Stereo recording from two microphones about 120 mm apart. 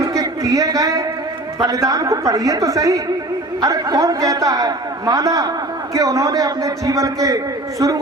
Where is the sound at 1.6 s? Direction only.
30° right (ahead or behind).